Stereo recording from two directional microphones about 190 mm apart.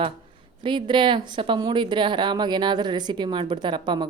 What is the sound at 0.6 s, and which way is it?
A woman's voice, 25° right (ahead or behind).